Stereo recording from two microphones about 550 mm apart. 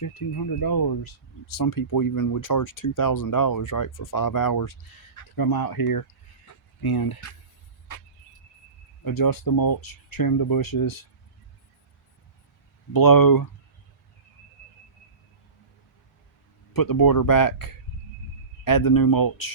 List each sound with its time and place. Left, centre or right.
0.0 s speech: left
9.0 s speech: left
12.9 s speech: left
16.7 s speech: left